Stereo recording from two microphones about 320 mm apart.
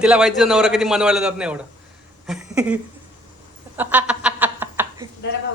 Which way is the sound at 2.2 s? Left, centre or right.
Centre.